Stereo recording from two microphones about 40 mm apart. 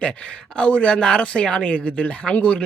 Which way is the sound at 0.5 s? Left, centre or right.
Left.